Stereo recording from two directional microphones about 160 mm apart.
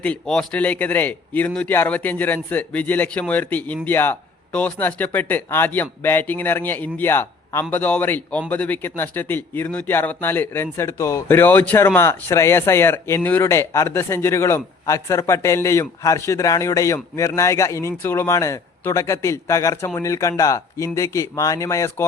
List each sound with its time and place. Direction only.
0.0 s speech: 5° left (ahead or behind)